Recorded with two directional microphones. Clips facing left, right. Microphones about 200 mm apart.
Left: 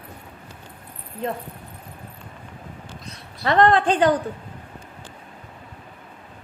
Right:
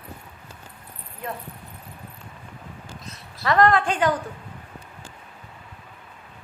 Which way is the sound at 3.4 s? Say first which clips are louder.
Left 2 dB; 30° left (ahead or behind).